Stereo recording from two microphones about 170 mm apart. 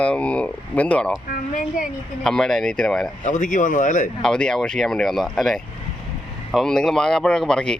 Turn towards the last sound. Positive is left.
turn(degrees=5)  # may be behind; listen again after turning